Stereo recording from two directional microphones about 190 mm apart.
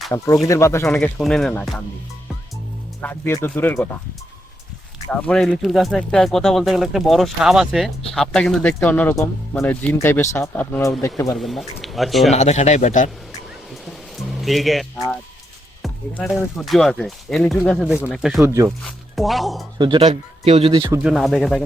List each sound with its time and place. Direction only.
0.1 s speech: 15° left (ahead or behind)
0.9 s speech: 5° left (ahead or behind)
3.0 s speech: 10° left (ahead or behind)
5.2 s speech: 5° left (ahead or behind)
11.3 s speech: centre (ahead or behind)
12.3 s speech: 35° left (ahead or behind)
14.2 s speech: centre (ahead or behind)
18.4 s speech: 15° right (ahead or behind)
18.9 s speech: centre (ahead or behind)
19.8 s speech: 30° right (ahead or behind)
20.9 s speech: 5° right (ahead or behind)